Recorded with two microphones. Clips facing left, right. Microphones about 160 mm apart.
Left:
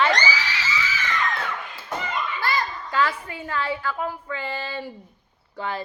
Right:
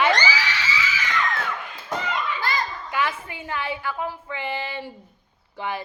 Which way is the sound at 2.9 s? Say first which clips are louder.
Left 3 dB; 20° right (ahead or behind).